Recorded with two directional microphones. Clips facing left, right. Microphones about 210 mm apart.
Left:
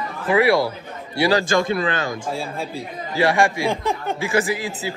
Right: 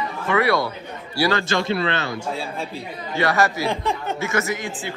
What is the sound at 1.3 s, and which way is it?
A man's voice, 45° left (ahead or behind).